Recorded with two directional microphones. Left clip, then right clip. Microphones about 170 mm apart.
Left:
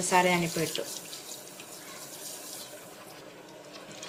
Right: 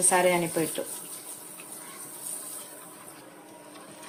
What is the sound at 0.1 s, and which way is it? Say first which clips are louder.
Speech: even; 60° right (ahead or behind).